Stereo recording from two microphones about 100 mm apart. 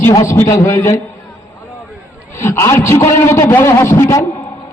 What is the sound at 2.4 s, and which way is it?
A man's voice, 30° left (ahead or behind).